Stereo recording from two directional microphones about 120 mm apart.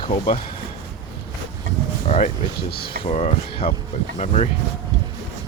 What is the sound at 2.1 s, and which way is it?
Speech, 65° left (ahead or behind).